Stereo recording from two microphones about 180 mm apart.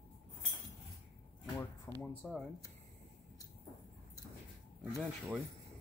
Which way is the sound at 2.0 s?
5° left (ahead or behind).